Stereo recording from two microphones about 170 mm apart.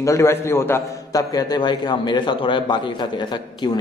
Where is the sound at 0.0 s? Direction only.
15° left (ahead or behind).